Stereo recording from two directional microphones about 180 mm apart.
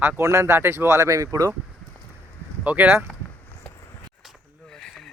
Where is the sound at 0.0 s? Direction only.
15° right (ahead or behind).